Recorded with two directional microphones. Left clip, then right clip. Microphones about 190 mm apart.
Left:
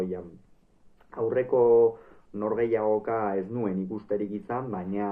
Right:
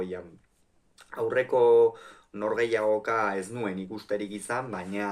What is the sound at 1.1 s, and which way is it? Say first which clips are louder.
Speech: even; 15° right (ahead or behind).